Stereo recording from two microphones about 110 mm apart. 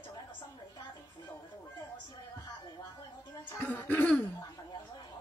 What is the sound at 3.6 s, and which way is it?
Speech, 15° left (ahead or behind).